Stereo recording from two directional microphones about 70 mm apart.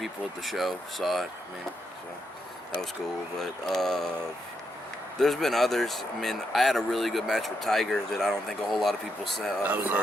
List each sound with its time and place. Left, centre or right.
0.0 s speech: centre
3.3 s speech: centre
5.2 s speech: centre
9.6 s speech: right